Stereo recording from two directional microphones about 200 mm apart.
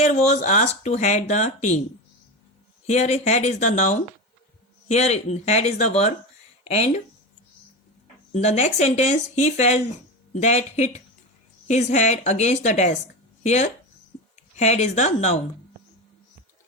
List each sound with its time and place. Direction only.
0.0 s speech: 35° left (ahead or behind)
2.8 s speech: 35° left (ahead or behind)
8.3 s speech: 35° left (ahead or behind)